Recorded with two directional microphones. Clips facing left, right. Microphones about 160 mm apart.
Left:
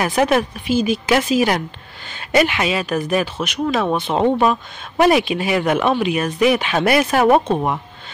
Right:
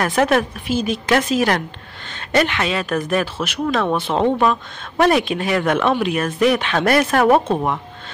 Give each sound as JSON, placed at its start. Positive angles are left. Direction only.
{"t": 0.0, "sound": "speech", "side_deg": 5}